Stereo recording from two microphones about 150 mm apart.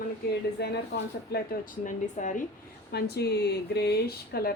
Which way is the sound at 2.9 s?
90° left.